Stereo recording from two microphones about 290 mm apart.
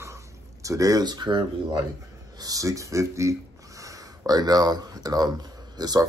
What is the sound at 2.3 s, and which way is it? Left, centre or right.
Speech, centre.